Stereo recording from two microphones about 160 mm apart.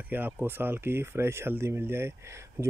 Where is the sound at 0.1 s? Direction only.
10° right (ahead or behind).